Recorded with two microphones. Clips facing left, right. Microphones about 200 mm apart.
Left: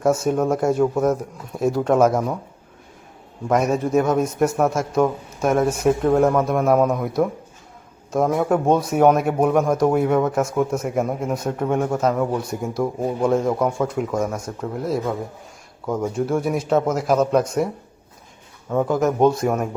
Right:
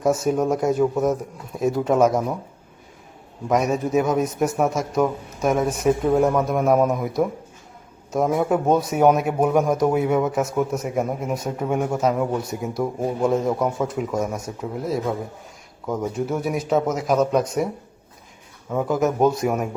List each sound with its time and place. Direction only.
0.0 s a man's voice: centre (ahead or behind)
3.5 s a man's voice: centre (ahead or behind)
18.7 s a man's voice: 5° right (ahead or behind)